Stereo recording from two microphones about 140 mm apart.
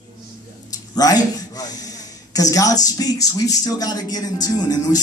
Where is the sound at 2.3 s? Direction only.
25° left (ahead or behind).